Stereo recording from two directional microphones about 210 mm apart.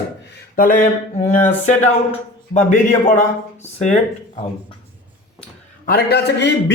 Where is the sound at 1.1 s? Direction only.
30° left (ahead or behind).